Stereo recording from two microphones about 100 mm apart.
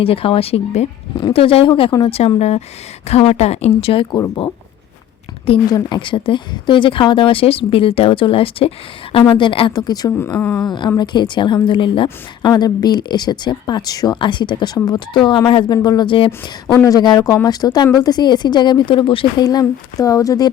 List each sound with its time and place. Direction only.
0.0 s speech: 70° left (ahead or behind)
1.3 s speech: 65° left (ahead or behind)
2.0 s a woman's voice: 90° left
5.6 s speech: 45° left (ahead or behind)
10.1 s speech: 25° left (ahead or behind)
10.6 s speech: 45° left (ahead or behind)
12.4 s speech: 45° left (ahead or behind)
14.2 s speech: 50° left (ahead or behind)
16.8 s speech: 40° left (ahead or behind); by 19.5 s 60° left (ahead or behind)
19.5 s speech: 35° left (ahead or behind)